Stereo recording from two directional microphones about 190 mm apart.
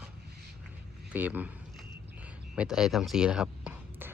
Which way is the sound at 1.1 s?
10° right (ahead or behind).